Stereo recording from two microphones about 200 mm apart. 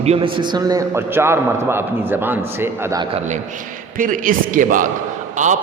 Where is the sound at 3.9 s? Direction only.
40° right (ahead or behind).